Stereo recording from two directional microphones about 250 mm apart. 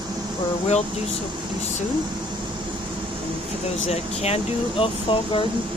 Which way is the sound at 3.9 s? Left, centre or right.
Left.